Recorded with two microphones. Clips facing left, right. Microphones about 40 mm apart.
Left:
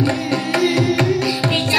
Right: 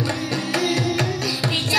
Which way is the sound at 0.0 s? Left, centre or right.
Left.